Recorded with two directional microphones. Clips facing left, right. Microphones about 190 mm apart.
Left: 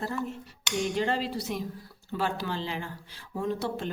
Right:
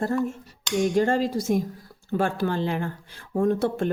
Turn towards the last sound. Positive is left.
turn(degrees=-55)  # may be behind; listen again after turning